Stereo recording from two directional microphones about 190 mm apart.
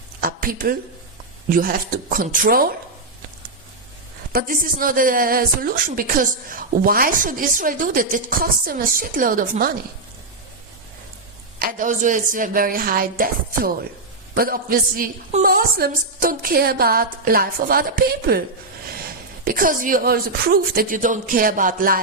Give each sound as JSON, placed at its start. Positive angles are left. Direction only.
{"t": 0.2, "sound": "a sound", "side_deg": -50}
{"t": 1.5, "sound": "speech", "side_deg": -45}
{"t": 4.3, "sound": "speech", "side_deg": -50}
{"t": 11.6, "sound": "speech", "side_deg": -40}
{"t": 19.5, "sound": "speech", "side_deg": -45}